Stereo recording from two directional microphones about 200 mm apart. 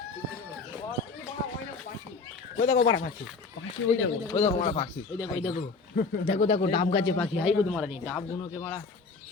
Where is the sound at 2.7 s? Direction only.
70° left (ahead or behind).